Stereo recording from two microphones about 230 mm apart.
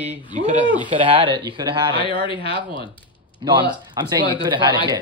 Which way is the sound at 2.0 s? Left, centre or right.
Left.